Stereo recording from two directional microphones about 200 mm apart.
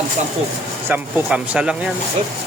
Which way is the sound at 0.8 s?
5° right (ahead or behind).